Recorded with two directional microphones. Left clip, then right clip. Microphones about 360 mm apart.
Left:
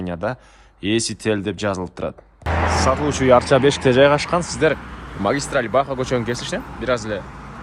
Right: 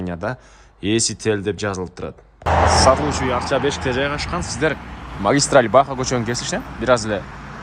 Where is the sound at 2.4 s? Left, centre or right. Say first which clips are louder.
Right 5 dB; right.